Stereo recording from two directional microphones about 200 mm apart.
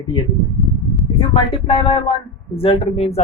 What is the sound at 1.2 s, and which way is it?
Speech, 25° left (ahead or behind).